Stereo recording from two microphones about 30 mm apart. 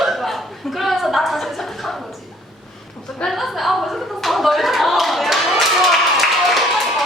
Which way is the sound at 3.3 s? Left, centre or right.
Centre.